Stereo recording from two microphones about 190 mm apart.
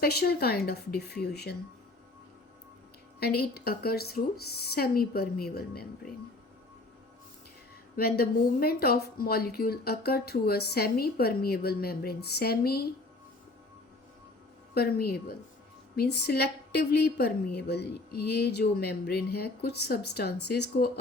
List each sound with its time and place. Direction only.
0.0 s a woman's voice: 55° left (ahead or behind)
3.2 s a woman's voice: 55° left (ahead or behind)
7.9 s a woman's voice: 55° left (ahead or behind)
14.8 s a woman's voice: 55° left (ahead or behind)